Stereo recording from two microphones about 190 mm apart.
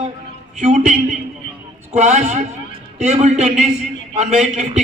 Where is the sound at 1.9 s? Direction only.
40° right (ahead or behind).